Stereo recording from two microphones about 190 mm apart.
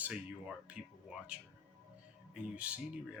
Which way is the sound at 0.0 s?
5° right (ahead or behind).